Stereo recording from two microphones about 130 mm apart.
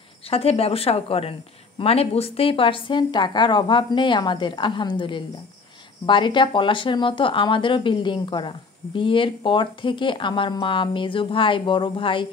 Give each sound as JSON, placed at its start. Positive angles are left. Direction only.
{"t": 0.3, "sound": "speech", "side_deg": 50}